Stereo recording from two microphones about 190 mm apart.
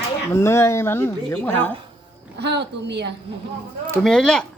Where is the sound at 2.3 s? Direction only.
60° right (ahead or behind).